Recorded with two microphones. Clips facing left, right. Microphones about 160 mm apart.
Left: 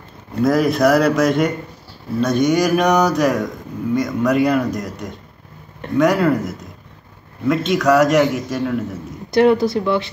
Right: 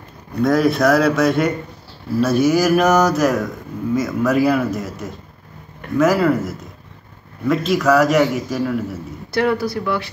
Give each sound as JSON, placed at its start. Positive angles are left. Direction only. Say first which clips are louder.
{"t": 0.4, "sound": "speech", "louder": "even", "side_deg": 0}
{"t": 9.3, "sound": "speech", "louder": "left 5 dB", "side_deg": 20}